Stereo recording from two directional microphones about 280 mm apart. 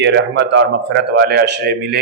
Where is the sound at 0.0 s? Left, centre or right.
Right.